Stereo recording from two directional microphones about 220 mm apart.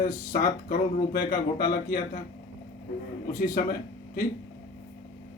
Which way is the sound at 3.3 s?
40° left (ahead or behind).